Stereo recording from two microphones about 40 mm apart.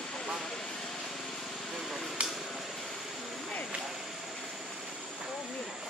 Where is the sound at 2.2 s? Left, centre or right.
Right.